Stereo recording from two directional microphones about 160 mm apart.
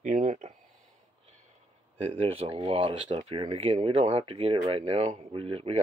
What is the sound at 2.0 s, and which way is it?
Speech, 35° right (ahead or behind).